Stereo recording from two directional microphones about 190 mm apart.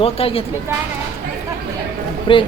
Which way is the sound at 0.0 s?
30° left (ahead or behind).